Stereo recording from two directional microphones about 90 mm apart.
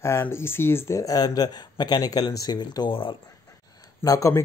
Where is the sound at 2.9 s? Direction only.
70° left (ahead or behind).